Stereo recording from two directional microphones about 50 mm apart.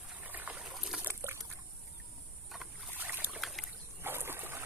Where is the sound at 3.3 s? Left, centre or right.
Centre.